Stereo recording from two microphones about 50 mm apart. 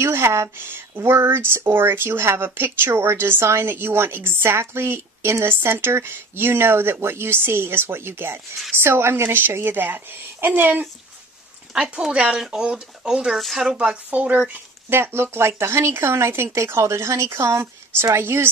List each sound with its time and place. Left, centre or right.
0.0 s a woman's voice: right
9.7 s speech: right
11.8 s speech: centre
12.1 s speech: right
12.4 s speech: centre
13.4 s speech: centre
13.7 s speech: centre
14.1 s speech: right
14.9 s a woman's voice: right